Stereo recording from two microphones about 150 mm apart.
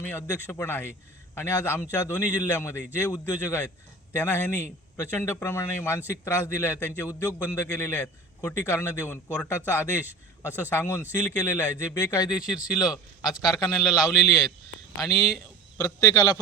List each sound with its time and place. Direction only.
0.1 s a man's voice: 15° left (ahead or behind)
13.3 s a man's voice: centre (ahead or behind)
14.3 s speech: 20° left (ahead or behind)
15.8 s speech: 25° left (ahead or behind)